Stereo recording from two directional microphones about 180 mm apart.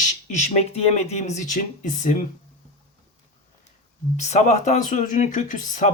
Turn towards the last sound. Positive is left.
turn(degrees=45)  # may be behind; listen again after turning